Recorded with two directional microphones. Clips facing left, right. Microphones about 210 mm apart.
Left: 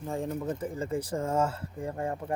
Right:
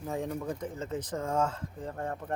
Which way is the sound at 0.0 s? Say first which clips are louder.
Left 2 dB; centre (ahead or behind).